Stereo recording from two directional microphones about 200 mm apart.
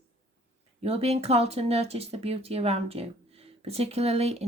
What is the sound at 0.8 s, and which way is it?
Speech, 30° right (ahead or behind).